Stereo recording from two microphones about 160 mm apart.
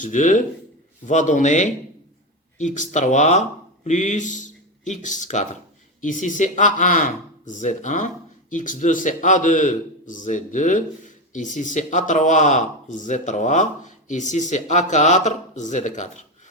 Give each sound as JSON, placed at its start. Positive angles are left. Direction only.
{"t": 0.0, "sound": "a man's voice", "side_deg": 50}